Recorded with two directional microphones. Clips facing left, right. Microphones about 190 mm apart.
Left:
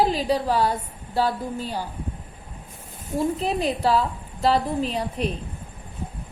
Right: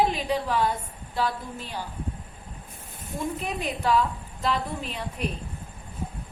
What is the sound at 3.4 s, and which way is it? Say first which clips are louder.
A woman's voice: left 7 dB; 35° left (ahead or behind).